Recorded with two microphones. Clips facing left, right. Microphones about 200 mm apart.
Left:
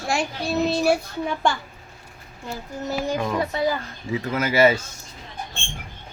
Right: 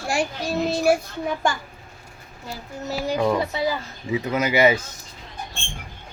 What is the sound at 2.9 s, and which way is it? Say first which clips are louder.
A child's voice: right 3 dB; 10° right (ahead or behind).